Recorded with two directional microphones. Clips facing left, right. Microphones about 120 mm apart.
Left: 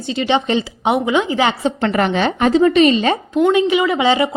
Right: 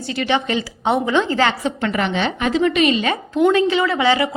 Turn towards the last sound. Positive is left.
turn(degrees=20)  # may be behind; listen again after turning